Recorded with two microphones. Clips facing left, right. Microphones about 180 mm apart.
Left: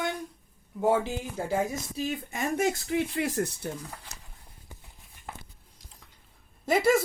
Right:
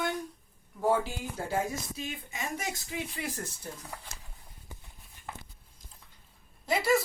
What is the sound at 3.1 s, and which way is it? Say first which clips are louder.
Speech: left 9 dB; 70° left (ahead or behind).